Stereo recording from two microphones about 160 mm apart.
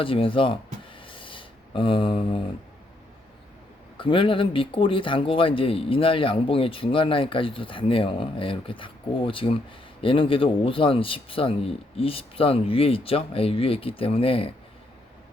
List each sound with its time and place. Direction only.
0.0 s speech: 35° left (ahead or behind)
0.9 s a sound: 35° left (ahead or behind)
3.9 s speech: 35° left (ahead or behind)